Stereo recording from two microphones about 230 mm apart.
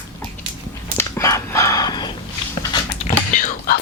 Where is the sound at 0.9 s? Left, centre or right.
Centre.